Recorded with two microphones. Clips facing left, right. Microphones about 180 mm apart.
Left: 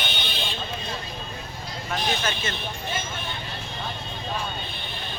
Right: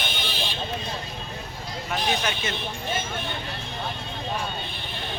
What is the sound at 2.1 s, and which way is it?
Speech, 15° right (ahead or behind).